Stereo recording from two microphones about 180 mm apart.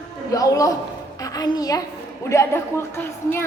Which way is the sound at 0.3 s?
20° left (ahead or behind).